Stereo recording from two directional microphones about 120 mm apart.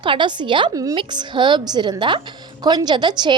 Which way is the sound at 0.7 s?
30° right (ahead or behind).